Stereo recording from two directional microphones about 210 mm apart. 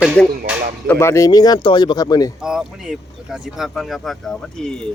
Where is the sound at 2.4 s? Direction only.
5° right (ahead or behind).